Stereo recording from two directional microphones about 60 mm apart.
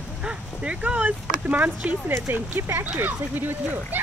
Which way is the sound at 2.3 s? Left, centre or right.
Right.